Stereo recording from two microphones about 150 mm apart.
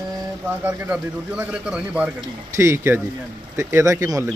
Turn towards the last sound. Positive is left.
turn(degrees=-20)  # may be behind; listen again after turning